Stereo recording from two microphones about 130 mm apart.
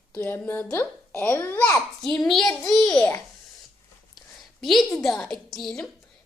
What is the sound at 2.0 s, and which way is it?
Speech, centre (ahead or behind).